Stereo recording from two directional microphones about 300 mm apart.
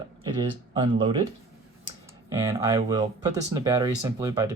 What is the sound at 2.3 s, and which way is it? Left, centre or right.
Speech, centre.